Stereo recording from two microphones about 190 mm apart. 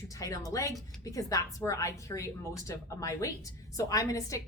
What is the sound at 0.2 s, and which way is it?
A woman's voice, 15° left (ahead or behind).